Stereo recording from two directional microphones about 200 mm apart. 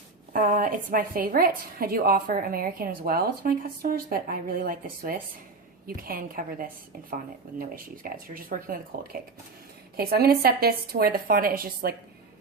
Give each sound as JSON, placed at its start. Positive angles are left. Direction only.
{"t": 0.3, "sound": "a woman's voice", "side_deg": -40}